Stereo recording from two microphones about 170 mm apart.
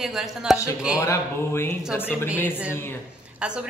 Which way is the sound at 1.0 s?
15° left (ahead or behind).